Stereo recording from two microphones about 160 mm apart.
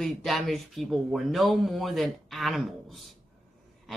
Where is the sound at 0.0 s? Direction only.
Centre (ahead or behind).